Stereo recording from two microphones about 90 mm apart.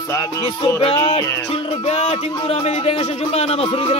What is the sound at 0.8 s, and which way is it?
Speech, 90° left.